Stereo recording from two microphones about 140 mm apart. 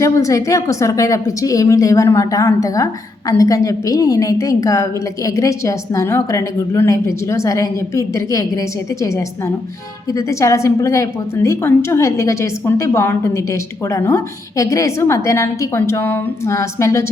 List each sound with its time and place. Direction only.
0.0 s a woman's voice: 25° left (ahead or behind)